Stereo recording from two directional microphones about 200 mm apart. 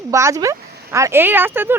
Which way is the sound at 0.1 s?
15° right (ahead or behind).